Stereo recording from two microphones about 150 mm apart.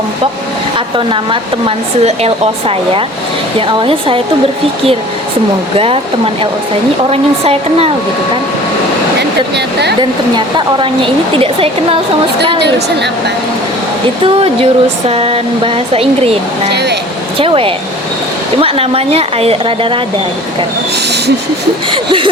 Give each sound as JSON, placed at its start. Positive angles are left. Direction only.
{"t": 0.9, "sound": "speech", "side_deg": -35}
{"t": 5.7, "sound": "speech", "side_deg": -40}
{"t": 10.0, "sound": "speech", "side_deg": -30}
{"t": 14.3, "sound": "speech", "side_deg": -40}
{"t": 17.3, "sound": "speech", "side_deg": -40}
{"t": 21.9, "sound": "speech", "side_deg": -35}